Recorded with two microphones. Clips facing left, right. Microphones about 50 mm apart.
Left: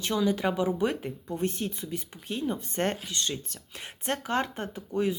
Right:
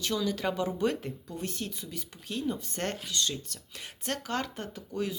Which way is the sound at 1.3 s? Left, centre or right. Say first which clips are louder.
Left 8 dB; left.